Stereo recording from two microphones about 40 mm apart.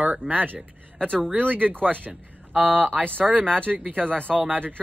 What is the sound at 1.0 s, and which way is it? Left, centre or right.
Speech, centre.